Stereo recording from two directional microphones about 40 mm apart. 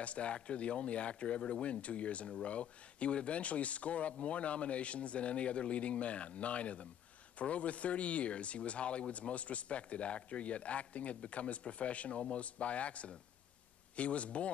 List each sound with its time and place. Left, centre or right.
0.0 s speech: left